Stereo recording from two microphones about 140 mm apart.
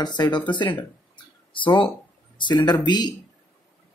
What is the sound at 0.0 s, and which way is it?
Speech, 30° left (ahead or behind).